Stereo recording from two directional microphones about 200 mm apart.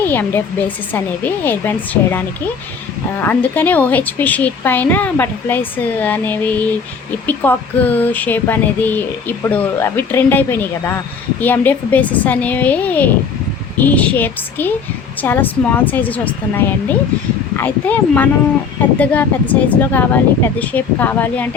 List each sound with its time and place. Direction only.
0.0 s speech: 10° left (ahead or behind)